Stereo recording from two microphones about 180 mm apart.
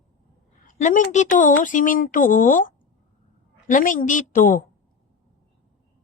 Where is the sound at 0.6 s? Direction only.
45° left (ahead or behind).